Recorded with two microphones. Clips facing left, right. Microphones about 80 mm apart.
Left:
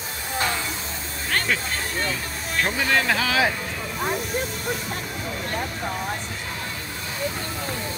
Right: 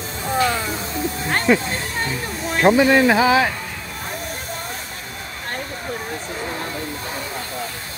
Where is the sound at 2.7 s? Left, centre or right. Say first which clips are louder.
Right 5 dB; right.